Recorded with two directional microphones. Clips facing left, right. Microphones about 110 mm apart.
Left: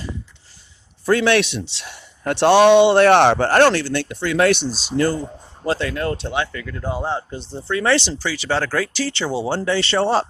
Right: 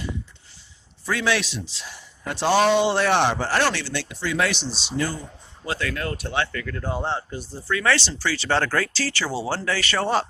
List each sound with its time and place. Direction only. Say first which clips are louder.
1.0 s a man's voice: left 8 dB; 55° left (ahead or behind)
5.2 s speech: left 10 dB; 30° left (ahead or behind)
6.3 s speech: left 2 dB; 15° left (ahead or behind)
7.2 s speech: left 3 dB; 25° left (ahead or behind)